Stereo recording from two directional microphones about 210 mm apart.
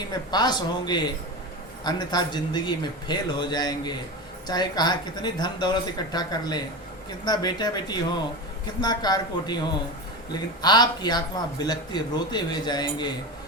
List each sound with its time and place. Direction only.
0.1 s a man's voice: 20° left (ahead or behind)
10.6 s a man's voice: 20° left (ahead or behind)